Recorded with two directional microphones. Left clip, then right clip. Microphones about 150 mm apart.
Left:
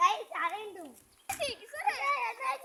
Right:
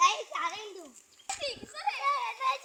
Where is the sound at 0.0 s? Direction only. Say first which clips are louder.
Right 1 dB; 25° left (ahead or behind).